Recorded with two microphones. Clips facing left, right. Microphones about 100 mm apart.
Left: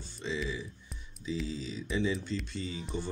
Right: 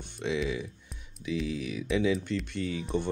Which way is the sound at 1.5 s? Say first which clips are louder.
Right 5 dB; 70° right (ahead or behind).